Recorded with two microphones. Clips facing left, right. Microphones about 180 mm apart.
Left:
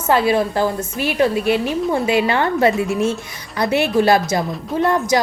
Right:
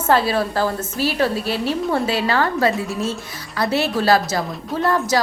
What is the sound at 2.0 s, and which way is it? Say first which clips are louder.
A woman's voice: left 3 dB; 20° left (ahead or behind).